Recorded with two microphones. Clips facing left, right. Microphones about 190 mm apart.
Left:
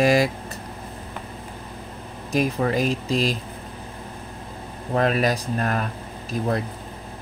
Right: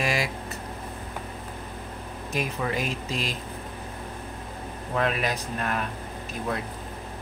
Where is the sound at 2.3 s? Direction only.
35° left (ahead or behind).